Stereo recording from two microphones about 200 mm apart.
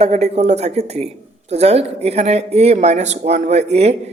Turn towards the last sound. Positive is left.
turn(degrees=-30)  # may be behind; listen again after turning